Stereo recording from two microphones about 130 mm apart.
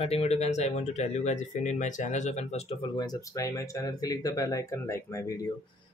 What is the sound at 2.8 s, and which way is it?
Speech, 30° left (ahead or behind).